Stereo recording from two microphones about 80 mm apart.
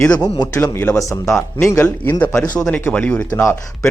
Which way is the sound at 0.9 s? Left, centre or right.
Left.